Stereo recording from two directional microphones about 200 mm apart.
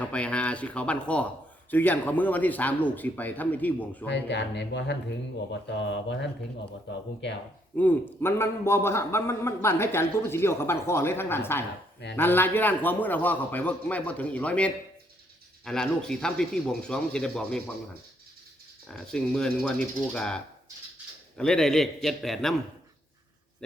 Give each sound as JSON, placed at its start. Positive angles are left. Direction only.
{"t": 0.0, "sound": "a man's voice", "side_deg": 5}
{"t": 4.0, "sound": "speech", "side_deg": 60}
{"t": 7.8, "sound": "a man's voice", "side_deg": 10}
{"t": 18.9, "sound": "speech", "side_deg": 5}